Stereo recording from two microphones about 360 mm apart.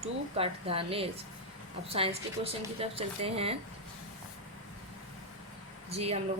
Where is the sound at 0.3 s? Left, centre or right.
Centre.